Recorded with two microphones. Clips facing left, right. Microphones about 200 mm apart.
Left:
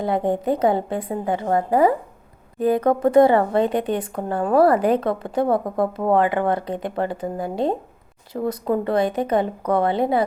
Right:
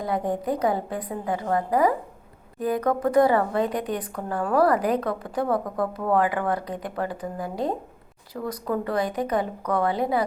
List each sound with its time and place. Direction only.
0.0 s speech: 25° left (ahead or behind)